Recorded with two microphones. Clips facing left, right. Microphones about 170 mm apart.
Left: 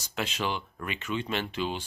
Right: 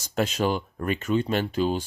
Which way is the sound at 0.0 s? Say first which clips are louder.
Right 7 dB; 45° right (ahead or behind).